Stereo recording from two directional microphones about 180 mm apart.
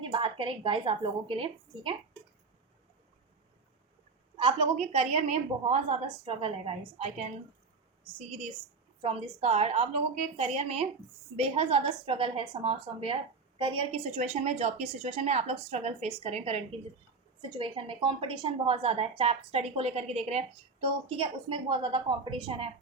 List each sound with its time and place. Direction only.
0.0 s a woman's voice: 30° right (ahead or behind)
4.4 s a woman's voice: 30° right (ahead or behind)
9.0 s a woman's voice: 30° right (ahead or behind)